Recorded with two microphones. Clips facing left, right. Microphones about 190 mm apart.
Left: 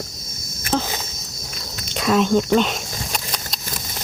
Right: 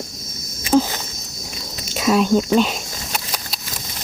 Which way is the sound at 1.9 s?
5° right (ahead or behind).